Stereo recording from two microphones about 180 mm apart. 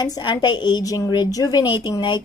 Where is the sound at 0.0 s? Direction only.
25° left (ahead or behind).